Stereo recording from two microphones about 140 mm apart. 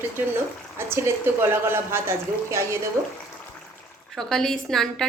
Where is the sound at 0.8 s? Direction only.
20° right (ahead or behind).